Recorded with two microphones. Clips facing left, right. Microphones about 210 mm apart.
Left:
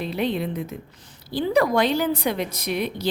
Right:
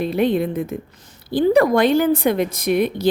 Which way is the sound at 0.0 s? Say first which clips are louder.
Right 7 dB; 50° right (ahead or behind).